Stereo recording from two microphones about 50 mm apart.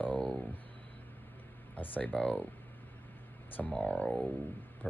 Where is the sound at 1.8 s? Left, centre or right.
Left.